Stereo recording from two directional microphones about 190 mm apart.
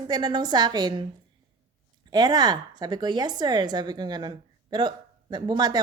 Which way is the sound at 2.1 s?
20° right (ahead or behind).